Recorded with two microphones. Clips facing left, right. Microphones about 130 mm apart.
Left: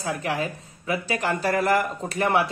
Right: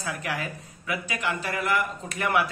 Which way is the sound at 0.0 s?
30° left (ahead or behind).